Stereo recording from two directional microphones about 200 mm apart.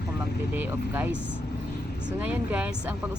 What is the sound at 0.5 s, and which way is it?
Speech, 10° right (ahead or behind).